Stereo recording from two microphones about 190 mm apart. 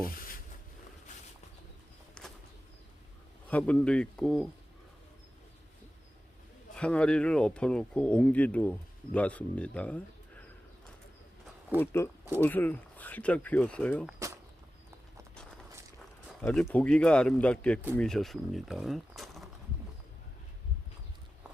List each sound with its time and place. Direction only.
0.0 s a sound: 50° left (ahead or behind)
2.2 s bird: 5° left (ahead or behind)
3.5 s speech: 5° left (ahead or behind)
6.7 s speech: 5° left (ahead or behind)
11.8 s speech: 15° left (ahead or behind)
16.4 s speech: 10° left (ahead or behind)